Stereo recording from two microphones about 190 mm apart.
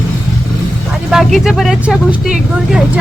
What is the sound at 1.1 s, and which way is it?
Speech, centre (ahead or behind).